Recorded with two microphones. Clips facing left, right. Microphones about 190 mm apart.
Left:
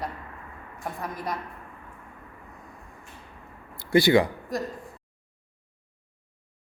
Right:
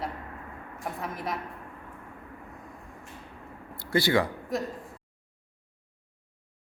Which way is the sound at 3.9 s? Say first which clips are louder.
Left 5 dB; 15° left (ahead or behind).